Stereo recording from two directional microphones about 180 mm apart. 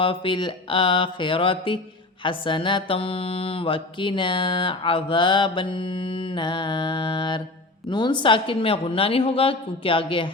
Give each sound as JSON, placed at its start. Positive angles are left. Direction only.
{"t": 0.0, "sound": "mantra", "side_deg": 30}